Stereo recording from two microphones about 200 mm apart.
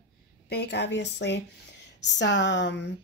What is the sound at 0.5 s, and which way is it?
Speech, 55° left (ahead or behind).